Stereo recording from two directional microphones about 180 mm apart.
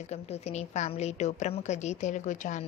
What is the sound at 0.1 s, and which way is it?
A woman's voice, 35° left (ahead or behind).